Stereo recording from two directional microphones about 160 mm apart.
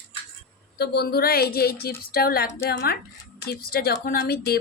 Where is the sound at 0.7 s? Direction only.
85° left; by 2.4 s 70° left (ahead or behind).